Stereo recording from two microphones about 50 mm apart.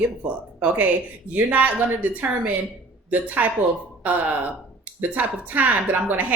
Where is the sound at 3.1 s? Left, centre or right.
Right.